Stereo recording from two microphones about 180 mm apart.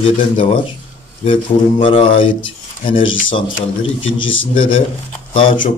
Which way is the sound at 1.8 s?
30° left (ahead or behind).